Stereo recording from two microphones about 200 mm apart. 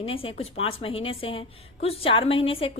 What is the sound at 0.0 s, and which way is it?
A woman's voice, 30° left (ahead or behind).